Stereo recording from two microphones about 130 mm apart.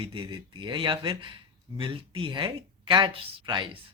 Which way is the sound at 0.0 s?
40° right (ahead or behind).